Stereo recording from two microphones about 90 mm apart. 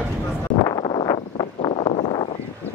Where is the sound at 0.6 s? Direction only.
55° left (ahead or behind); by 2.3 s 75° left (ahead or behind).